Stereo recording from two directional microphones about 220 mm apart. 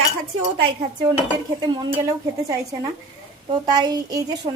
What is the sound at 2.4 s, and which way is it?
A child's voice, 15° right (ahead or behind).